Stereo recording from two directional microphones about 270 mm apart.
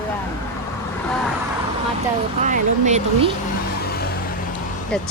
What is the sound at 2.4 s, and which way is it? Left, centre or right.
Speech, right.